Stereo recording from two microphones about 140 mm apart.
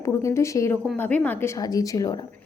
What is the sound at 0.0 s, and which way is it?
A woman's voice, 20° left (ahead or behind).